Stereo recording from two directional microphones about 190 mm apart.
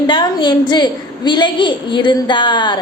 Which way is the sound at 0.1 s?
25° left (ahead or behind).